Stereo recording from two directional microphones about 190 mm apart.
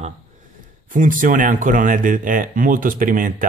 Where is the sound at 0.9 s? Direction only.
45° right (ahead or behind).